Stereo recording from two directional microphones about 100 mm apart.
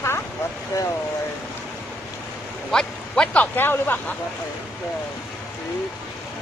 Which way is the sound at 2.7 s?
5° left (ahead or behind).